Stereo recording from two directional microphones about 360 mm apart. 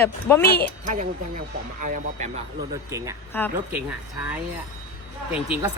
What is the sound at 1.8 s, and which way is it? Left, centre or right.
Speech, right.